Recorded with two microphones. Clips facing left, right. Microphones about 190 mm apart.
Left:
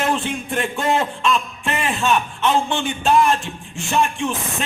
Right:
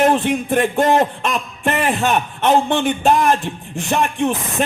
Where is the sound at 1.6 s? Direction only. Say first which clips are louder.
Right 4 dB; 55° right (ahead or behind).